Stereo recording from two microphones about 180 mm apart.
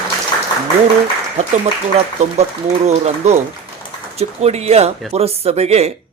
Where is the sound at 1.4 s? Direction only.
35° right (ahead or behind).